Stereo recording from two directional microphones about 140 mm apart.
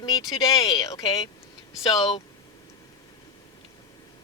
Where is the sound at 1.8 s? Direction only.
40° left (ahead or behind).